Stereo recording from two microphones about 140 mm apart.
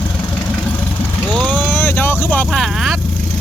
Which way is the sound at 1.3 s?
10° left (ahead or behind).